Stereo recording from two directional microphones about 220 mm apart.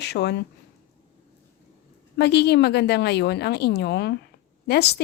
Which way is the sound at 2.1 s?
50° left (ahead or behind).